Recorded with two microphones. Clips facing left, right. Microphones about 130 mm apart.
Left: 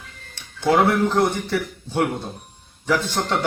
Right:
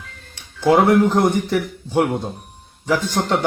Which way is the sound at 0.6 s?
20° right (ahead or behind).